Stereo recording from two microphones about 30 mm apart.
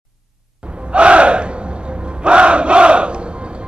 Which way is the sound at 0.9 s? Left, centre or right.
Right.